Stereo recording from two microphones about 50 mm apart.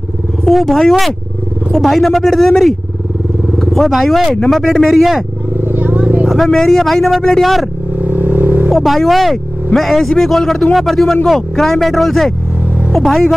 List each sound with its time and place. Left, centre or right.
0.5 s speech: centre
3.7 s speech: centre
5.6 s vehicle: right
6.2 s speech: centre
8.0 s vehicle: right
8.6 s speech: centre